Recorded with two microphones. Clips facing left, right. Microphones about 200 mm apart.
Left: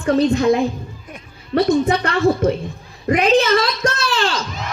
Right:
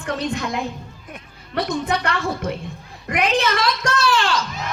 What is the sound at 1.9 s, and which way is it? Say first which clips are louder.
A woman's voice: left 6 dB; 25° left (ahead or behind).